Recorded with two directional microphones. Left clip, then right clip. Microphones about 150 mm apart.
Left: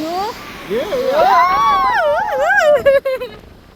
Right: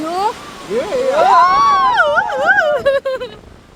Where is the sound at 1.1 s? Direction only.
20° right (ahead or behind).